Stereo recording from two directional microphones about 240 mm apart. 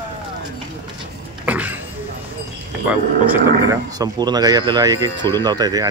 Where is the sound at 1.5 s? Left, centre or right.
Centre.